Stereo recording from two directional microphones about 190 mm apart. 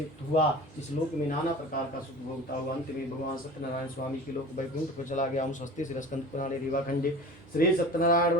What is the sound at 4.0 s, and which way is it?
Speech, 45° left (ahead or behind).